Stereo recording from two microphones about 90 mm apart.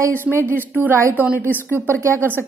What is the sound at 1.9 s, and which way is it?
Speech, 30° right (ahead or behind).